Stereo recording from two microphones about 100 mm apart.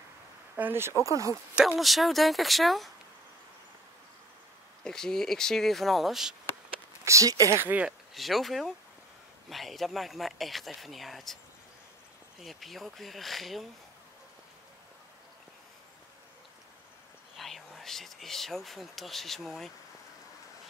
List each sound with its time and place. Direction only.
0.6 s speech: 20° right (ahead or behind)
1.0 s speech: 35° right (ahead or behind)
1.5 s speech: 10° right (ahead or behind)
4.8 s speech: 5° left (ahead or behind)
7.1 s speech: 35° right (ahead or behind)
7.6 s speech: 15° right (ahead or behind)
8.1 s speech: centre (ahead or behind)
12.4 s speech: centre (ahead or behind)
17.4 s speech: centre (ahead or behind)